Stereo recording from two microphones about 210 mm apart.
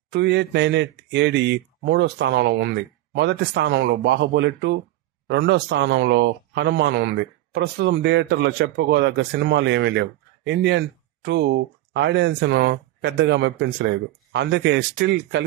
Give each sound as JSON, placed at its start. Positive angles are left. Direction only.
{"t": 0.1, "sound": "speech", "side_deg": -55}